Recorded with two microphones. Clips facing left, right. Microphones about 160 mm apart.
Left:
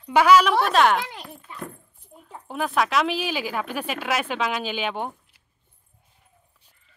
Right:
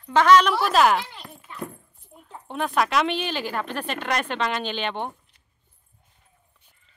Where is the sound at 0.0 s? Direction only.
10° left (ahead or behind).